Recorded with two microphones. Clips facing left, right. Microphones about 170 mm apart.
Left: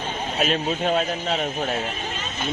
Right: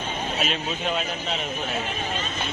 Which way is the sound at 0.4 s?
45° left (ahead or behind).